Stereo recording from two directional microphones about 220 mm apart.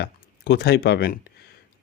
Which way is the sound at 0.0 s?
50° left (ahead or behind).